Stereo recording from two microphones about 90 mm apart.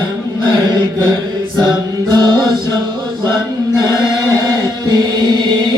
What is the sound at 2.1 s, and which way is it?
Music, 55° right (ahead or behind).